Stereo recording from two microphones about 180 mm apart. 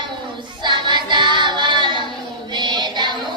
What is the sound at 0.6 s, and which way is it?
Child singing, 25° right (ahead or behind).